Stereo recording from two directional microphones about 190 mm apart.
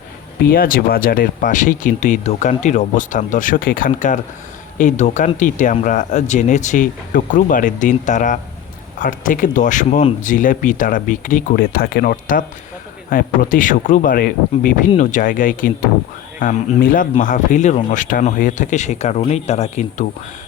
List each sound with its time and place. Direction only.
0.4 s speech: 50° left (ahead or behind)